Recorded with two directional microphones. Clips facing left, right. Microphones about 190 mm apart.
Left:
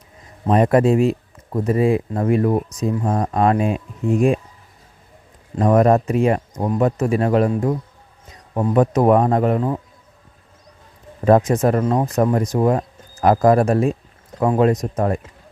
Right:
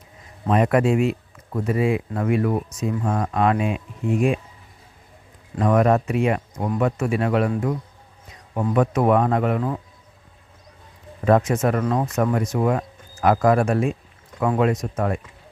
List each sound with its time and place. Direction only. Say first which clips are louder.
0.4 s speech: left 4 dB; 35° left (ahead or behind)
5.5 s speech: left 4 dB; 35° left (ahead or behind)
11.3 s speech: left 4 dB; 35° left (ahead or behind)